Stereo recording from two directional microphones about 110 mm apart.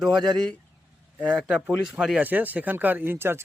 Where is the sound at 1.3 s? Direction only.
5° right (ahead or behind).